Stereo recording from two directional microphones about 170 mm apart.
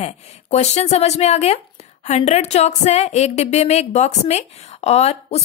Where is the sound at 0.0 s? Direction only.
40° left (ahead or behind).